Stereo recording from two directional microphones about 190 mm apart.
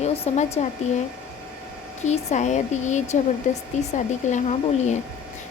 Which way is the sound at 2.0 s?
35° left (ahead or behind).